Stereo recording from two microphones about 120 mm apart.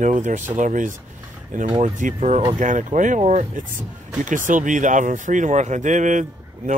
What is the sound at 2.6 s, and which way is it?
Speech, 90° right.